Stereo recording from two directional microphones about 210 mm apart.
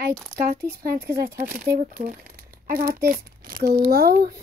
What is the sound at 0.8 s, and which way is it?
Speech, 45° right (ahead or behind).